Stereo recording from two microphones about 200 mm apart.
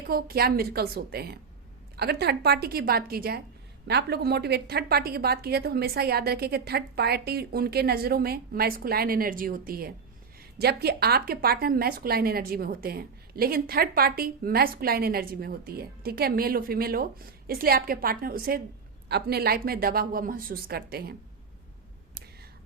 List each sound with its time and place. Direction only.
0.1 s a woman's voice: 50° right (ahead or behind)